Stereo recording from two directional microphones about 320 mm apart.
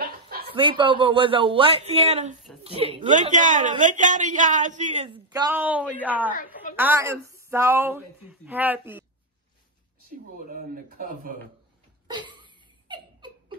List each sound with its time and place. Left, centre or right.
0.5 s a woman's voice: centre
5.1 s a woman's voice: centre
10.5 s a woman's voice: right
12.1 s laughter: centre